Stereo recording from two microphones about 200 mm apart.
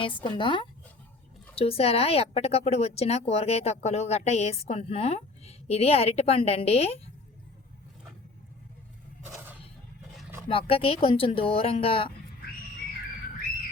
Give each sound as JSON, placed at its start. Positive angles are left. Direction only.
{"t": 0.0, "sound": "speech", "side_deg": 25}
{"t": 9.2, "sound": "a sound", "side_deg": -10}
{"t": 10.5, "sound": "speech", "side_deg": 25}